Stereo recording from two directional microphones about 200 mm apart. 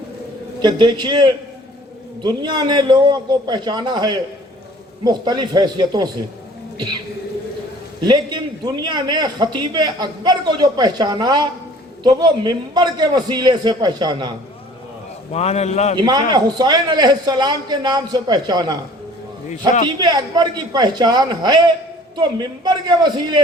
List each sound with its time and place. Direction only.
0.6 s a man's voice: 20° right (ahead or behind)
8.0 s a man's voice: 20° right (ahead or behind)
15.3 s a man's voice: 30° left (ahead or behind)
16.0 s a man's voice: 20° right (ahead or behind)
20.0 s a man's voice: 20° right (ahead or behind)